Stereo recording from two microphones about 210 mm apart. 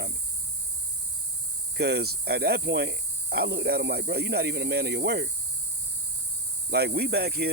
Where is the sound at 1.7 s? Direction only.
50° right (ahead or behind).